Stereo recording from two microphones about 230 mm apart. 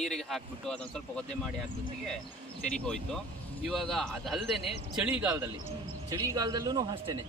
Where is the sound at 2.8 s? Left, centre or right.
Centre.